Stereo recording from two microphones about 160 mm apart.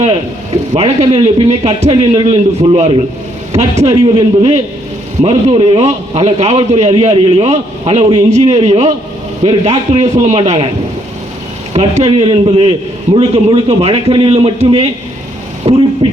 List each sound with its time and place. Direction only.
0.7 s a man's voice: 40° right (ahead or behind)
3.8 s a man's voice: 25° right (ahead or behind)
5.8 s a man's voice: 45° right (ahead or behind)
6.9 s a man's voice: 30° right (ahead or behind)
11.7 s a man's voice: 40° right (ahead or behind)
15.6 s a sound: 40° right (ahead or behind)